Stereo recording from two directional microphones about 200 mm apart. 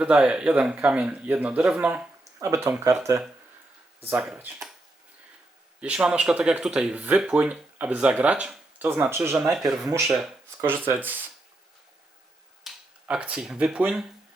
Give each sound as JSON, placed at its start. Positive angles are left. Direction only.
{"t": 0.0, "sound": "speech", "side_deg": -5}
{"t": 5.8, "sound": "speech", "side_deg": -5}
{"t": 9.4, "sound": "speech", "side_deg": 0}
{"t": 12.6, "sound": "speech", "side_deg": -5}